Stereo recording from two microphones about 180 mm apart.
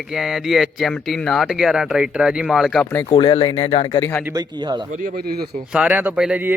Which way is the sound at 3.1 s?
30° left (ahead or behind).